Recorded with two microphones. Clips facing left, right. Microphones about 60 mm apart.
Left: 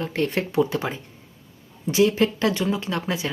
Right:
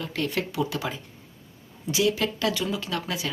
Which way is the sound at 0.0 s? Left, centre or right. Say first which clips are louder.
Left 4 dB; left.